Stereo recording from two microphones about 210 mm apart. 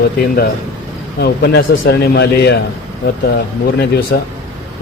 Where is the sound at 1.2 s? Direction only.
50° left (ahead or behind).